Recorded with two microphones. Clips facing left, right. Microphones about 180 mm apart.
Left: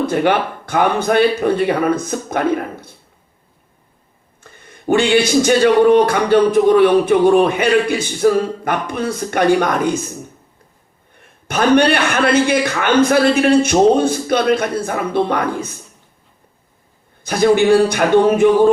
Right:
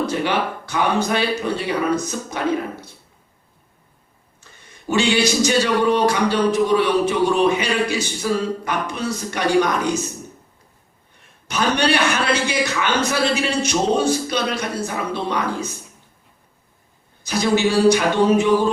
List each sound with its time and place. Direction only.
0.0 s speech: 55° left (ahead or behind)
4.6 s speech: 55° left (ahead or behind)
11.2 s speech: 55° left (ahead or behind)
17.2 s speech: 55° left (ahead or behind)